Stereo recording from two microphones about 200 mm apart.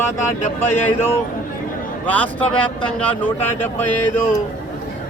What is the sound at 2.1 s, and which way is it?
Speech, 5° left (ahead or behind).